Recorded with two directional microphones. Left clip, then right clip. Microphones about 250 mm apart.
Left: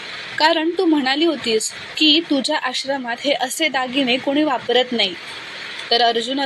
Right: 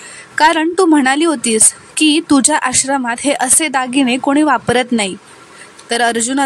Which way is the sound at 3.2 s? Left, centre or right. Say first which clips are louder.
Right 4 dB; right.